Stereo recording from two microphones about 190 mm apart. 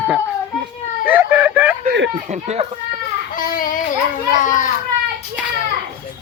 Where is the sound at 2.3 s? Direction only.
35° right (ahead or behind).